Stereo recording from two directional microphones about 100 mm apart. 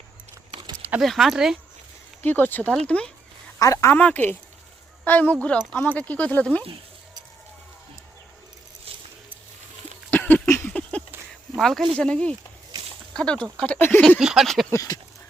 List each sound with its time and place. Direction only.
0.8 s a sound: 15° right (ahead or behind)
1.0 s speech: centre (ahead or behind)
2.2 s speech: 20° left (ahead or behind)
3.6 s speech: 35° left (ahead or behind)
3.9 s speech: 15° left (ahead or behind)
8.9 s keys jangling: 80° right
10.1 s a sound: 15° left (ahead or behind)
11.5 s speech: centre (ahead or behind); by 14.0 s 20° left (ahead or behind)
14.2 s speech: 5° right (ahead or behind)
14.7 s speech: 35° left (ahead or behind)